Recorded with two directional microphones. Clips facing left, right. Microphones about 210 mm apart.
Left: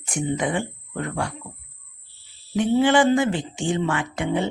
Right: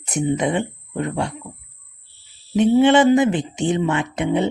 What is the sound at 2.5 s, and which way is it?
Speech, 20° right (ahead or behind).